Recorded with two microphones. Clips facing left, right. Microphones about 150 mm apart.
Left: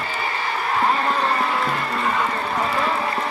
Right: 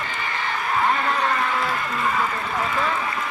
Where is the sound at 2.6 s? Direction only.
35° left (ahead or behind).